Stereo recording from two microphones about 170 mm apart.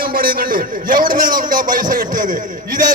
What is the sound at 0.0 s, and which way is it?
A man's voice, 60° right (ahead or behind).